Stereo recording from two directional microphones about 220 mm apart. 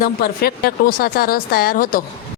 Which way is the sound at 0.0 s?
45° left (ahead or behind).